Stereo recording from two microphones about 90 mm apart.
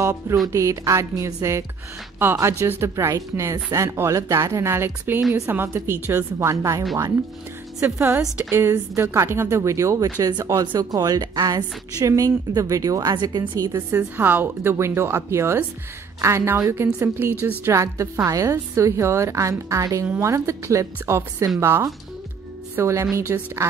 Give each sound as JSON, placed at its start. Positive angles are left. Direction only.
{"t": 0.0, "sound": "music", "side_deg": -35}
{"t": 0.5, "sound": "a woman's voice", "side_deg": -35}
{"t": 2.6, "sound": "a woman's voice", "side_deg": -30}
{"t": 7.8, "sound": "a woman's voice", "side_deg": -30}
{"t": 10.0, "sound": "a woman's voice", "side_deg": -45}
{"t": 13.6, "sound": "a woman's voice", "side_deg": -40}
{"t": 13.8, "sound": "a woman's voice", "side_deg": -20}